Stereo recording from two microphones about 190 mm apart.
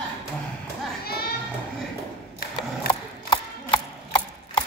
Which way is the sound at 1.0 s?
55° left (ahead or behind).